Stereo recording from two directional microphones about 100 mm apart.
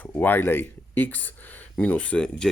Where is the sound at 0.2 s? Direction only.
20° left (ahead or behind).